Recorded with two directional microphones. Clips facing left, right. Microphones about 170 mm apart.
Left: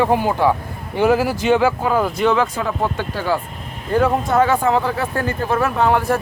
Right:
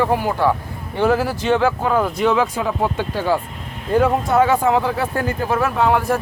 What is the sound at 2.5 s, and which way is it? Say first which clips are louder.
Speech: right 1 dB; 15° right (ahead or behind).